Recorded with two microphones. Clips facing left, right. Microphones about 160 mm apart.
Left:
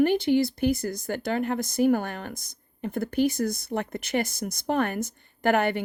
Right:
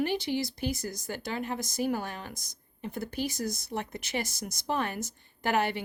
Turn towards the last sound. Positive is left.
turn(degrees=55)  # may be behind; listen again after turning